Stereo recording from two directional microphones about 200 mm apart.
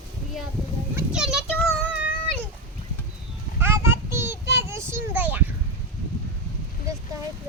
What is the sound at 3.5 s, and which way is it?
Child singing, 10° right (ahead or behind).